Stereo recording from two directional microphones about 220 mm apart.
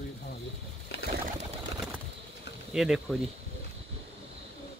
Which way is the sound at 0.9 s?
45° left (ahead or behind).